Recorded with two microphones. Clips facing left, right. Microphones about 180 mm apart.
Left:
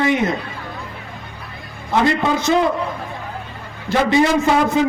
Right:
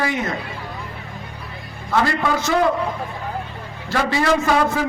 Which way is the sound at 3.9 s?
20° left (ahead or behind).